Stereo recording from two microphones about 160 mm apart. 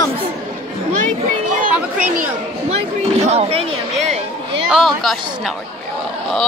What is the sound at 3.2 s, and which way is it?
Speech, 40° right (ahead or behind).